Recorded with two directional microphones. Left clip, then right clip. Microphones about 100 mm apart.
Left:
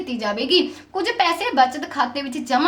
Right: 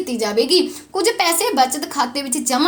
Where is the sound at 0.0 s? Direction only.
25° right (ahead or behind).